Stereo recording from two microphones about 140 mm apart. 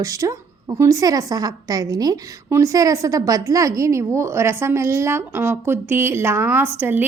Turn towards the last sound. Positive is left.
turn(degrees=-15)  # may be behind; listen again after turning